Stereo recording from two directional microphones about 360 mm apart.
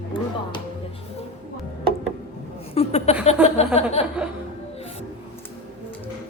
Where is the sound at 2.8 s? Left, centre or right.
Centre.